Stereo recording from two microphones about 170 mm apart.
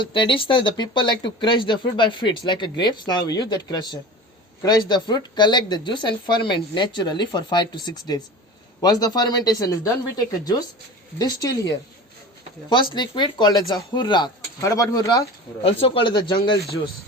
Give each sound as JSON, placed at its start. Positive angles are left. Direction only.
{"t": 0.0, "sound": "speech", "side_deg": 30}
{"t": 11.2, "sound": "speech", "side_deg": 20}
{"t": 12.7, "sound": "speech", "side_deg": 30}